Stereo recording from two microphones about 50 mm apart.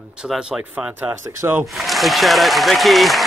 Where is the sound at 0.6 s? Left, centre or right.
Right.